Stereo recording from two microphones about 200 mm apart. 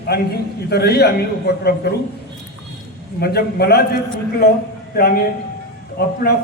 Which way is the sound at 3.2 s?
55° left (ahead or behind).